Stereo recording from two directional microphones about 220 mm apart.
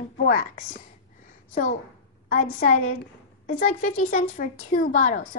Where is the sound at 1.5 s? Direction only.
35° left (ahead or behind).